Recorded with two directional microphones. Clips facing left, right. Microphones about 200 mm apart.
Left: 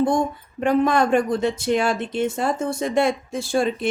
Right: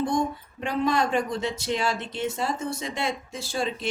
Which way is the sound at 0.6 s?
50° left (ahead or behind).